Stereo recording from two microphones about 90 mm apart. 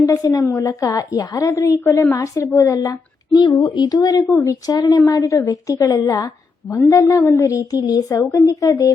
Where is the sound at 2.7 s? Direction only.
45° left (ahead or behind).